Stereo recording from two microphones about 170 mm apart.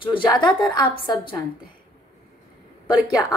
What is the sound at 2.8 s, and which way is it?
Speech, 25° left (ahead or behind).